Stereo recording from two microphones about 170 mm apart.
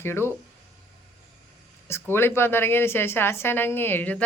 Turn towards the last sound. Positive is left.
turn(degrees=10)  # may be behind; listen again after turning